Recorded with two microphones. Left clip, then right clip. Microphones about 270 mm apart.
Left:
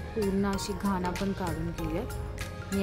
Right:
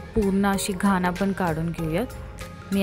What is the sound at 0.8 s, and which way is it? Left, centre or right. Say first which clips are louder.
Speech: right 9 dB; right.